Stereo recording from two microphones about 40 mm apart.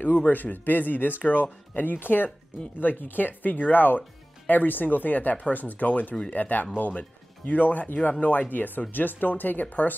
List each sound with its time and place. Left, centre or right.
0.3 s speech: left